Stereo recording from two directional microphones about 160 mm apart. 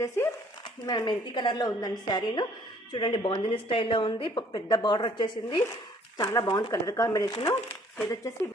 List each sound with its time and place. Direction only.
0.2 s speech: 15° left (ahead or behind)
0.9 s a woman's voice: 25° left (ahead or behind)